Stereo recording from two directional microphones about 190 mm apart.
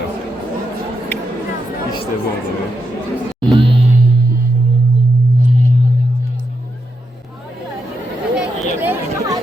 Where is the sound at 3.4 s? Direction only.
30° right (ahead or behind).